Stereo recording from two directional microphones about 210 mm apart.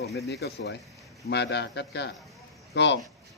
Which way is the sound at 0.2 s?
50° left (ahead or behind).